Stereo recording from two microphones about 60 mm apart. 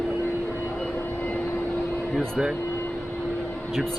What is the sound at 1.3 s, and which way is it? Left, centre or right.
Vehicle, left.